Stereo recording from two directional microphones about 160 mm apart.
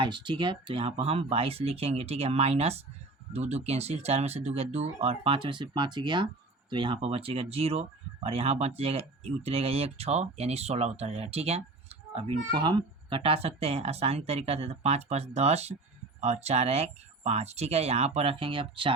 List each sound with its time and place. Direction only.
0.0 s speech: 30° right (ahead or behind)